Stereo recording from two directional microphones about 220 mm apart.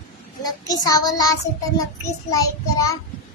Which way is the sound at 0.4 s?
15° left (ahead or behind).